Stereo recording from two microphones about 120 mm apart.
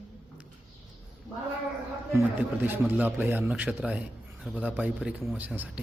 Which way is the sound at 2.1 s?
20° right (ahead or behind).